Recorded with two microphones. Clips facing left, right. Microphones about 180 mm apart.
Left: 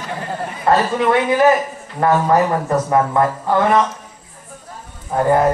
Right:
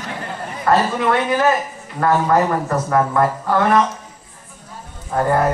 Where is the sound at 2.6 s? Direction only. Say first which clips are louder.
Left 2 dB; 20° left (ahead or behind).